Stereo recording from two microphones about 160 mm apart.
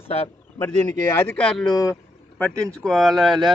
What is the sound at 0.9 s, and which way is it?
Speech, 15° left (ahead or behind).